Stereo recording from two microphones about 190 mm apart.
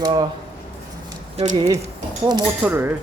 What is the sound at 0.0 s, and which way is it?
Speech, 20° right (ahead or behind).